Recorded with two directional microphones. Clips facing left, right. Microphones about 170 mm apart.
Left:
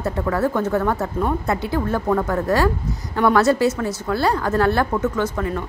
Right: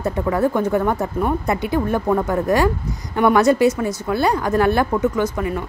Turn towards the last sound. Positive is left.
turn(degrees=-10)  # may be behind; listen again after turning